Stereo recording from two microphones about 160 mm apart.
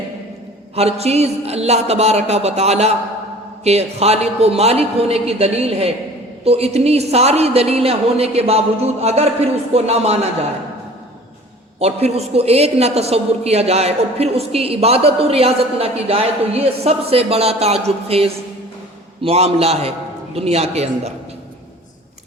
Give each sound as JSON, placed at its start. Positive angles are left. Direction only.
{"t": 0.8, "sound": "a man's voice", "side_deg": -40}
{"t": 11.8, "sound": "a man's voice", "side_deg": -40}